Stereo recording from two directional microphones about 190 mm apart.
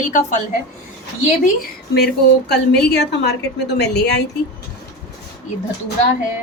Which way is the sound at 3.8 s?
60° left (ahead or behind).